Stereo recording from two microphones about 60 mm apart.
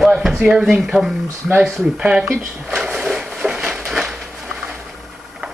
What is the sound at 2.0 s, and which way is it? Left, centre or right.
Speech, centre.